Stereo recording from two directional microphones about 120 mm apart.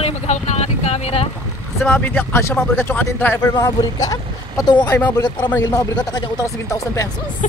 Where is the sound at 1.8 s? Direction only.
15° left (ahead or behind).